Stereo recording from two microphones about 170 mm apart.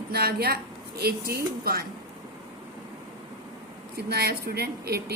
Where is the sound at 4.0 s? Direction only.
70° right (ahead or behind).